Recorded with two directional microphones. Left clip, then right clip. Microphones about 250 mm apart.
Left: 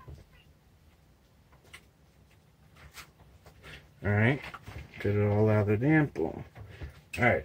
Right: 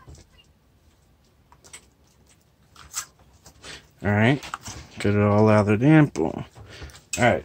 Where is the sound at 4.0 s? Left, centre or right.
Right.